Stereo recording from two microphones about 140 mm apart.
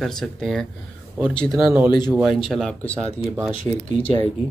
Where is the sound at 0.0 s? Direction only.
Centre (ahead or behind).